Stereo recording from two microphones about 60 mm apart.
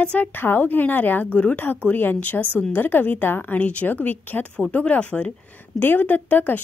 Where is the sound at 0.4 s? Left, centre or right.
Left.